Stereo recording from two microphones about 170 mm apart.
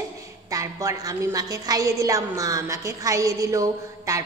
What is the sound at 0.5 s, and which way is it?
A woman's voice, 20° right (ahead or behind).